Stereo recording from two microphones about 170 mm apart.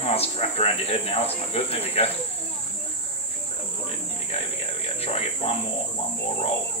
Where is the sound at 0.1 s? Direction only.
35° left (ahead or behind).